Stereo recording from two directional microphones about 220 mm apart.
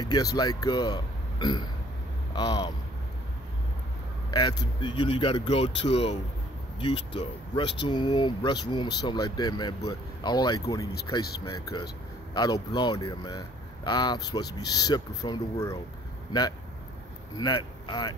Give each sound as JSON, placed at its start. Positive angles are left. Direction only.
{"t": 0.0, "sound": "speech", "side_deg": 20}
{"t": 4.3, "sound": "speech", "side_deg": 20}
{"t": 17.4, "sound": "speech", "side_deg": 20}